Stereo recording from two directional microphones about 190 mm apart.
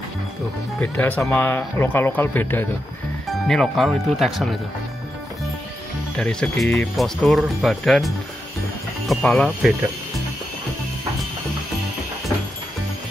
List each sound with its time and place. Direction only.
0.7 s speech: 10° left (ahead or behind)
6.1 s speech: 5° left (ahead or behind)
9.1 s speech: centre (ahead or behind)